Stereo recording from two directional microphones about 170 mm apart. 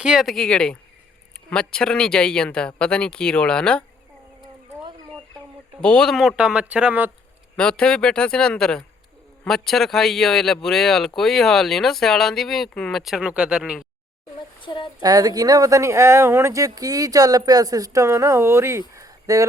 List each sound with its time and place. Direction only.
0.0 s a man's voice: 5° right (ahead or behind)
5.8 s a man's voice: 5° left (ahead or behind)
7.5 s a man's voice: 5° left (ahead or behind)
14.6 s speech: 30° left (ahead or behind)
15.0 s speech: 20° right (ahead or behind)
18.9 s a sound: 20° right (ahead or behind)